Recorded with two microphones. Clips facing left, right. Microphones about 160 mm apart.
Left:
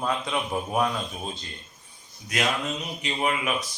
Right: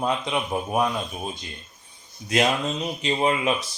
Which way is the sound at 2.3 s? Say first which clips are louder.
Right 5 dB; 30° right (ahead or behind).